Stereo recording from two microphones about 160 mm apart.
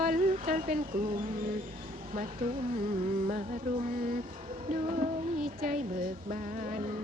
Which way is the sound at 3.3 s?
60° right (ahead or behind).